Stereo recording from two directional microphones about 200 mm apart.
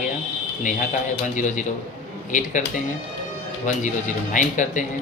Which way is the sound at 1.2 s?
40° left (ahead or behind).